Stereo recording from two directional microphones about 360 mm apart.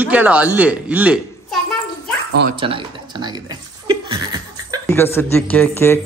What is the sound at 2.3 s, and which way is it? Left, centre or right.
Speech, right.